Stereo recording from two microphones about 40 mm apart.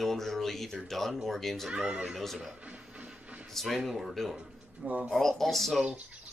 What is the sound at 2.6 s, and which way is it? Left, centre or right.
Printer, right.